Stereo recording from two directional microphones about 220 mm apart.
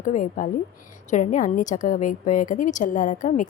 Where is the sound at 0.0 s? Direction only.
35° left (ahead or behind).